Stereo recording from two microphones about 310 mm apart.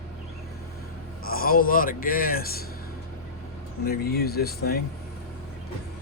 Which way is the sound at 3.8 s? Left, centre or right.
Left.